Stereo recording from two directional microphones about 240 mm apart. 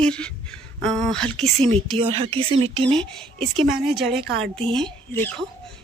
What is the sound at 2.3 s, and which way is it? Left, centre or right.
Speech, right.